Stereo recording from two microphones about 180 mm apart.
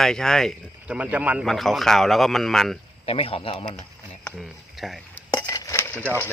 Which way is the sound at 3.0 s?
30° left (ahead or behind).